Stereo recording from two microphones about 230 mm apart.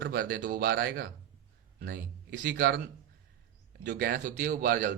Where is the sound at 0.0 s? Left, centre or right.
Right.